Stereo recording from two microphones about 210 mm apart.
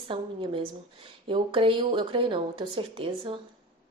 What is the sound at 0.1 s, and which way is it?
A woman's voice, 25° right (ahead or behind).